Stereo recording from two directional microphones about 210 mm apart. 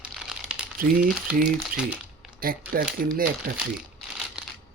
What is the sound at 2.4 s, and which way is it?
Speech, 45° right (ahead or behind).